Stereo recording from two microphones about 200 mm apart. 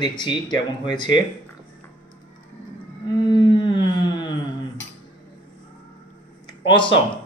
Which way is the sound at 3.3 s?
25° left (ahead or behind).